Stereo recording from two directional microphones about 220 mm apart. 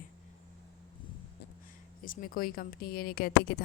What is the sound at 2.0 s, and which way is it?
A woman's voice, 40° left (ahead or behind).